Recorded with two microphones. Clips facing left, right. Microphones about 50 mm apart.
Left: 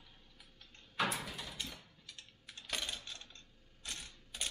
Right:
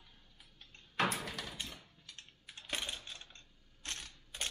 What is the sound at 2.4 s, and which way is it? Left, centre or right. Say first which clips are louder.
Typing: right 1 dB; right.